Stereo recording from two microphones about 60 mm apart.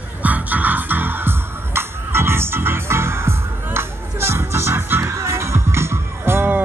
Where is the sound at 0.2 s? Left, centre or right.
Right.